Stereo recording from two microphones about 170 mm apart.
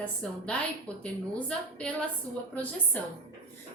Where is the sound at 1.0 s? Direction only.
5° left (ahead or behind).